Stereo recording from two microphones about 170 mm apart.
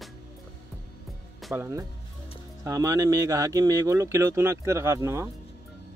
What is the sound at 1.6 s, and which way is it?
Speech, 15° right (ahead or behind).